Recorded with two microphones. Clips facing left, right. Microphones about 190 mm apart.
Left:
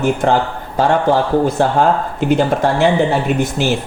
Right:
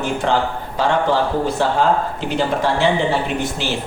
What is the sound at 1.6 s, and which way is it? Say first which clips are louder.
Speech: left 3 dB; 50° left (ahead or behind).